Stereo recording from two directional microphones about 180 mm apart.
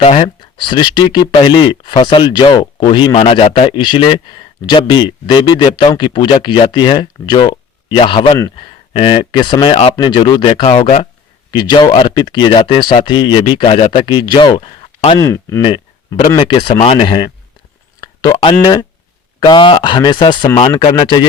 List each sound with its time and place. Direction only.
0.0 s speech: 30° left (ahead or behind)
11.5 s speech: 25° left (ahead or behind)
15.3 s speech: 15° left (ahead or behind)
15.6 s speech: 25° left (ahead or behind)
18.0 s a sound: 20° left (ahead or behind)
18.6 s speech: 20° left (ahead or behind)